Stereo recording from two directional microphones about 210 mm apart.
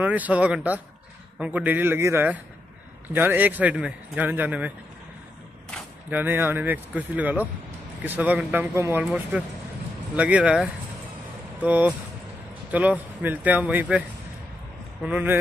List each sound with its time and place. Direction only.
0.0 s a man's voice: 5° right (ahead or behind)
6.0 s a man's voice: 10° right (ahead or behind)
15.0 s a man's voice: 10° right (ahead or behind)